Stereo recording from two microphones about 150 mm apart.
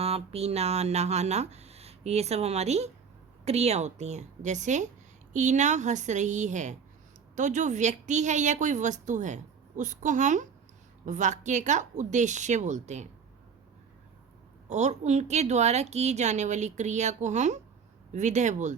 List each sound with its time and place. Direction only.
0.0 s a woman's voice: 40° right (ahead or behind)
14.7 s a woman's voice: 50° right (ahead or behind)